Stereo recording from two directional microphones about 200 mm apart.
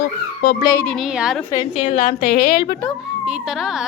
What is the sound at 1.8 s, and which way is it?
Speech, 40° left (ahead or behind).